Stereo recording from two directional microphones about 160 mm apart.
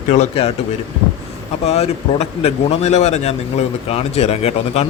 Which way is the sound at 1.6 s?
40° left (ahead or behind).